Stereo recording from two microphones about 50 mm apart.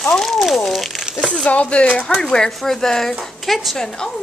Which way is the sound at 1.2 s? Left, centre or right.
Centre.